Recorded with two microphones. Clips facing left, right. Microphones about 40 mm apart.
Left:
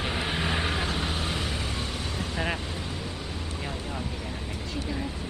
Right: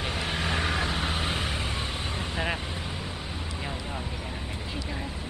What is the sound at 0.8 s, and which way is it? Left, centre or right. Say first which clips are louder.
Vehicle: right 1 dB; centre.